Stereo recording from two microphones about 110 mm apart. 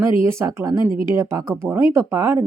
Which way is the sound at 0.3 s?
25° right (ahead or behind).